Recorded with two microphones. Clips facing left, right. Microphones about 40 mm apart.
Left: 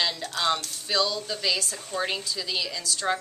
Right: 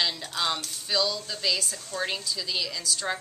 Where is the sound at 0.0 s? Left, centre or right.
Centre.